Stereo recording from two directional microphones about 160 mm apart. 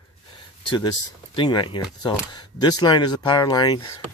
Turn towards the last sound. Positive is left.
turn(degrees=25)  # may be behind; listen again after turning